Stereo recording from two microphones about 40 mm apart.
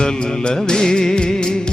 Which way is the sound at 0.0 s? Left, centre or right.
Centre.